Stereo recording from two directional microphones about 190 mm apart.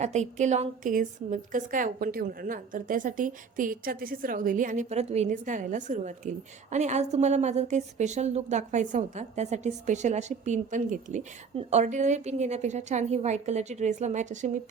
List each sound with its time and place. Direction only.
0.0 s a woman's voice: 35° right (ahead or behind)